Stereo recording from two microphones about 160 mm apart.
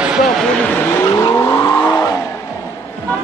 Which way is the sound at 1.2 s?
20° left (ahead or behind).